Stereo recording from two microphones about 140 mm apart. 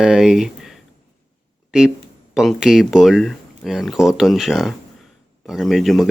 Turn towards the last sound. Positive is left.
turn(degrees=0)  # may be behind; listen again after turning